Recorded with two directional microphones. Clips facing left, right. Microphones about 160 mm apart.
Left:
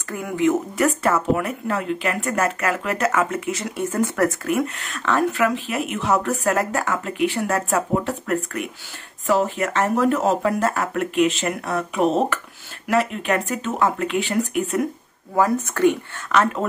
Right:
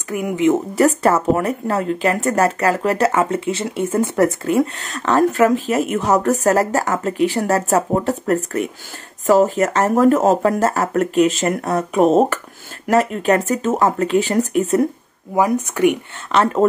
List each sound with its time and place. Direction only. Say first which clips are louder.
0.1 s speech: right 4 dB; 20° right (ahead or behind)
0.7 s speech: right 5 dB; 35° right (ahead or behind)
15.3 s speech: right 2 dB; 15° right (ahead or behind)
16.3 s speech: right 4 dB; 30° right (ahead or behind)